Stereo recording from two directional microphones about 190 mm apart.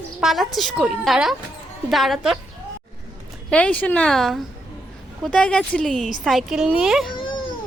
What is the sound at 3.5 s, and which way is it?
A woman's voice, 5° left (ahead or behind).